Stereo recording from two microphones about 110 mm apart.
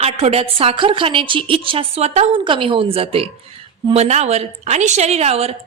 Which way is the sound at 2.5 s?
55° right (ahead or behind).